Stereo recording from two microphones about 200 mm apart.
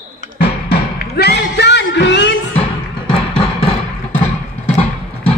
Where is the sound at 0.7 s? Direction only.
50° left (ahead or behind).